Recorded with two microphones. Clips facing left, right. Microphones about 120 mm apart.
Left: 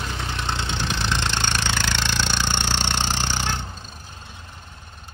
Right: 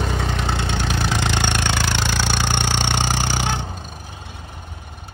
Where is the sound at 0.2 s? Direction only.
55° right (ahead or behind).